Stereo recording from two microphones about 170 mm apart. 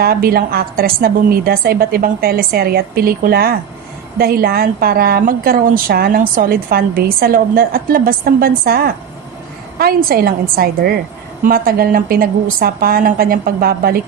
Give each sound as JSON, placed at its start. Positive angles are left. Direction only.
{"t": 0.0, "sound": "a woman's voice", "side_deg": -60}